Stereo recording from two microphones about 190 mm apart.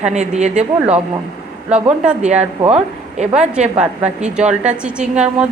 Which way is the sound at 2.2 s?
35° right (ahead or behind).